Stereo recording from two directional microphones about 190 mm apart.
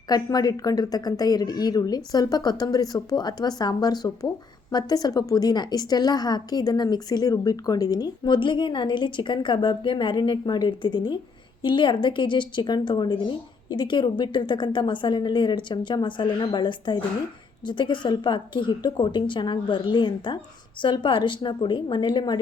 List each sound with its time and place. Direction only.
0.1 s a woman's voice: 20° left (ahead or behind)